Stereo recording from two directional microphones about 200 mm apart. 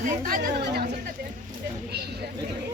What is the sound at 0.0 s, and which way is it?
Speech, 45° right (ahead or behind).